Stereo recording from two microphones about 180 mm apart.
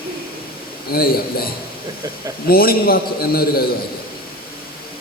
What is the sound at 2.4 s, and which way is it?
A man's voice, 55° left (ahead or behind).